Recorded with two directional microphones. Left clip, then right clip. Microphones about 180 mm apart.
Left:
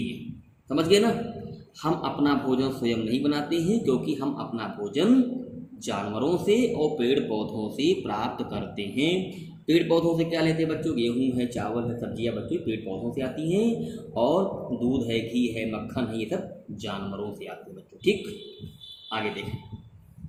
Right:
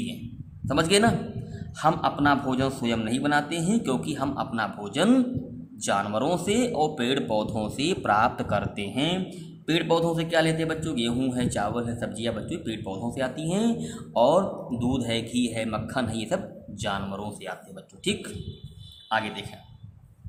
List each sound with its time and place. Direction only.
0.7 s a man's voice: 50° right (ahead or behind)